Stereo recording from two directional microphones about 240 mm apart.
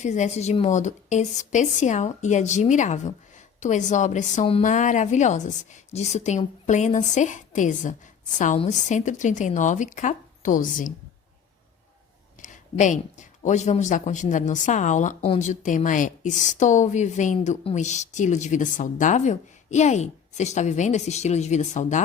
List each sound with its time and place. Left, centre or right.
0.0 s a woman's voice: left
12.4 s speech: left